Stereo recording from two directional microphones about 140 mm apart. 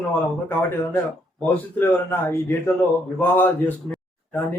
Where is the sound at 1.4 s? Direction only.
15° left (ahead or behind).